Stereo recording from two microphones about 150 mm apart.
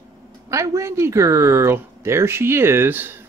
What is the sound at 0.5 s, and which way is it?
Speech, 20° right (ahead or behind).